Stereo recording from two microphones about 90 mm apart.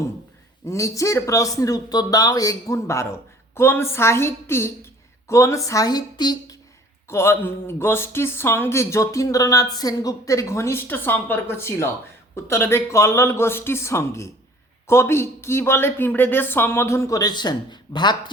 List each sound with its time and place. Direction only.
0.6 s speech: 35° left (ahead or behind); by 6.6 s 50° left (ahead or behind)
7.1 s speech: 30° left (ahead or behind); by 18.2 s 55° left (ahead or behind)